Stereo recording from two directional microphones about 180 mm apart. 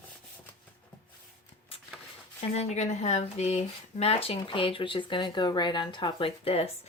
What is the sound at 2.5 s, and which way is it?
Speech, 40° left (ahead or behind).